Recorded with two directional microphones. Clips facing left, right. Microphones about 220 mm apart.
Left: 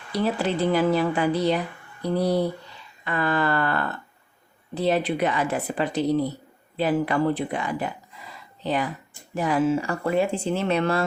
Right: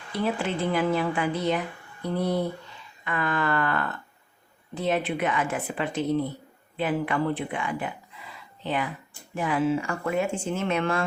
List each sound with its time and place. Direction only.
0.1 s speech: 40° left (ahead or behind)